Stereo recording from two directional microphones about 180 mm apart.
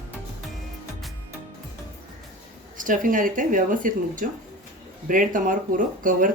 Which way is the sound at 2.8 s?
50° right (ahead or behind).